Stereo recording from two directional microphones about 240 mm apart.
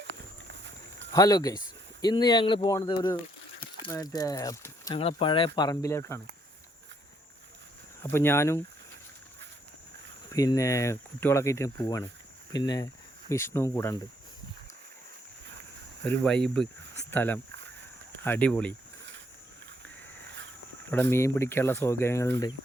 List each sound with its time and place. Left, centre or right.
1.1 s speech: centre
8.0 s speech: centre
10.3 s speech: centre
16.0 s speech: centre
20.9 s speech: centre